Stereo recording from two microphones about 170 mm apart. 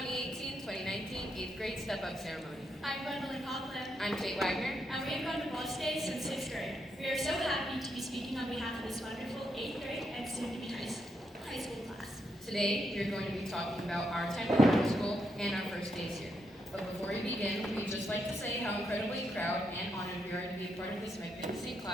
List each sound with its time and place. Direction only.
0.0 s a sound: centre (ahead or behind)
2.8 s a woman's voice: centre (ahead or behind)
12.5 s a woman's voice: centre (ahead or behind)
17.1 s a woman's voice: 5° left (ahead or behind)